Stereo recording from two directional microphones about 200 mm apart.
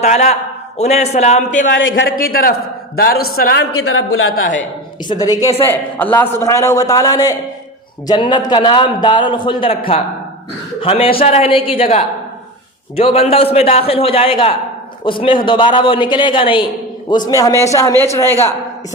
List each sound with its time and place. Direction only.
0.0 s a man's voice: 35° left (ahead or behind)
1.7 s a man's voice: 70° left (ahead or behind)
2.0 s a man's voice: 45° left (ahead or behind)
3.7 s a woman's voice: 90° left
5.0 s a man's voice: 20° left (ahead or behind)